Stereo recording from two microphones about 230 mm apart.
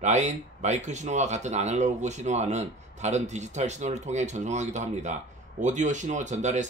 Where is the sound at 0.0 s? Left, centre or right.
Right.